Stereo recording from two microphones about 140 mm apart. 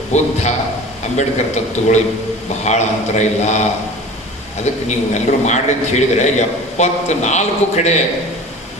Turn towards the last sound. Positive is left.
turn(degrees=55)  # may be behind; listen again after turning